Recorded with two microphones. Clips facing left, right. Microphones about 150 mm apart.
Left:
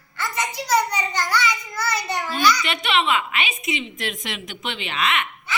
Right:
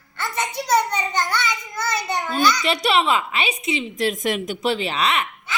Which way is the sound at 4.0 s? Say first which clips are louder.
Right 8 dB; 45° right (ahead or behind).